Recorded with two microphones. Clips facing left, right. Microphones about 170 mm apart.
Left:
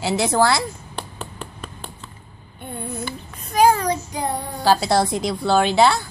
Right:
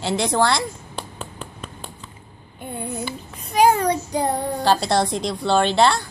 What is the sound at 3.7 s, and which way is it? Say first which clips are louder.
Child singing: even; 30° right (ahead or behind).